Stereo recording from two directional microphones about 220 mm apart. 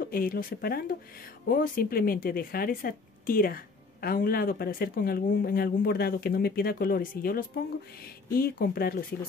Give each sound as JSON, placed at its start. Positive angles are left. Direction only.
{"t": 0.1, "sound": "speech", "side_deg": 40}